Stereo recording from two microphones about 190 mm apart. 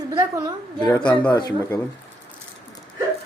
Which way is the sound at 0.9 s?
10° left (ahead or behind).